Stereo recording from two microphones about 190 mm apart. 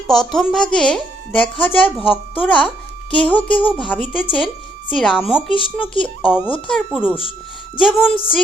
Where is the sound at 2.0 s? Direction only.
30° left (ahead or behind).